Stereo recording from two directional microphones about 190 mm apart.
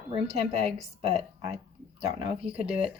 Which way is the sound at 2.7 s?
30° right (ahead or behind).